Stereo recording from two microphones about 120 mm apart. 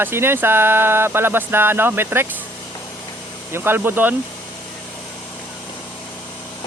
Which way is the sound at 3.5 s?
20° right (ahead or behind).